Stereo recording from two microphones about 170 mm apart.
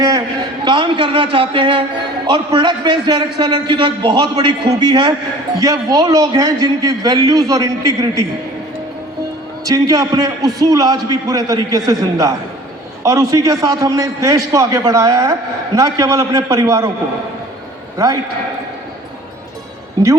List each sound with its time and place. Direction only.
0.6 s a man's voice: 30° right (ahead or behind)
9.6 s a man's voice: 20° right (ahead or behind)
17.9 s a man's voice: 20° right (ahead or behind)